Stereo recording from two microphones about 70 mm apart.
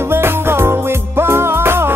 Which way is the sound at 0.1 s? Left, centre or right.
Right.